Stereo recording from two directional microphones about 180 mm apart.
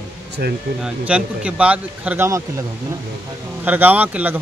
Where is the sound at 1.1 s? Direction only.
5° right (ahead or behind).